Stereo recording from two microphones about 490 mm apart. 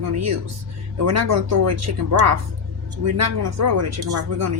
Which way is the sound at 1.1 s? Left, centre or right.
Right.